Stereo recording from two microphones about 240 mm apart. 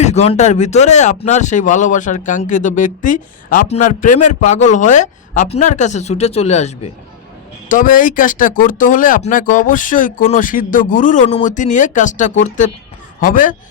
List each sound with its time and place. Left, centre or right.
0.0 s a man's voice: left